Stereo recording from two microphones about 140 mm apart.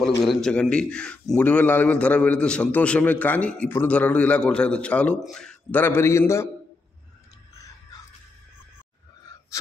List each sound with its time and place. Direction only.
0.2 s a man's voice: centre (ahead or behind); by 6.5 s 20° left (ahead or behind)